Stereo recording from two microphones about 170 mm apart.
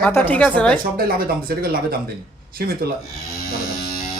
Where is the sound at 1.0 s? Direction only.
60° right (ahead or behind).